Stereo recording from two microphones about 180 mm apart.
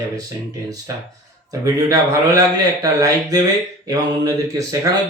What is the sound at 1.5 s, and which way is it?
Speech, 20° right (ahead or behind).